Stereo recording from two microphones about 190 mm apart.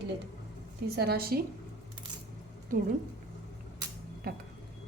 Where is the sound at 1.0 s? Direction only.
55° right (ahead or behind).